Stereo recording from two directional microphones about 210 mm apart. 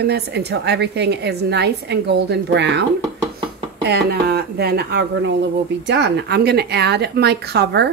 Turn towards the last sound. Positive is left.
turn(degrees=-50)  # may be behind; listen again after turning